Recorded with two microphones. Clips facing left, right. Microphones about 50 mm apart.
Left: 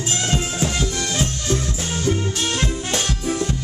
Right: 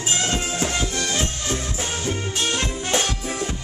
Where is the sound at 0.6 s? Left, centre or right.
Centre.